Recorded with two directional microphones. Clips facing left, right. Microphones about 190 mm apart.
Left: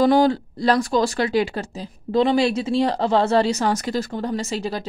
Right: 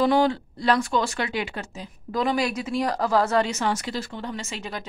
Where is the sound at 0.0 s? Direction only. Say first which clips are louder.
Left 4 dB; 40° left (ahead or behind).